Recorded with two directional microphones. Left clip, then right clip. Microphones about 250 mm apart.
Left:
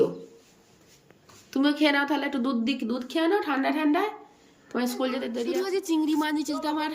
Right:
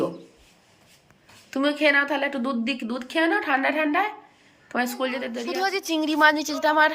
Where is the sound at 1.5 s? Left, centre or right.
Centre.